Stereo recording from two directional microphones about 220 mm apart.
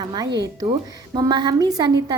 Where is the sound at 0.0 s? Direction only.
20° right (ahead or behind).